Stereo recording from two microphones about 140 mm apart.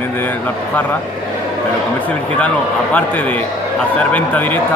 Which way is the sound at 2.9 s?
10° left (ahead or behind).